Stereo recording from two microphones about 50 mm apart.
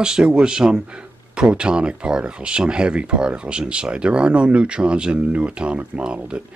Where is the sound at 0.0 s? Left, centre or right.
Centre.